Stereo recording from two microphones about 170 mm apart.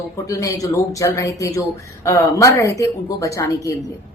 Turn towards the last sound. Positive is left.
turn(degrees=20)  # may be behind; listen again after turning